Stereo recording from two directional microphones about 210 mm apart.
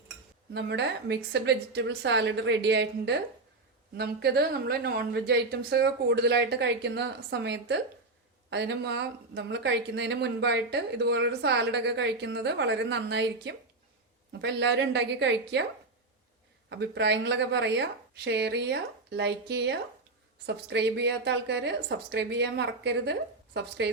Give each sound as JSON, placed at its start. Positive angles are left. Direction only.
{"t": 0.5, "sound": "a woman's voice", "side_deg": -55}
{"t": 16.6, "sound": "a woman's voice", "side_deg": -55}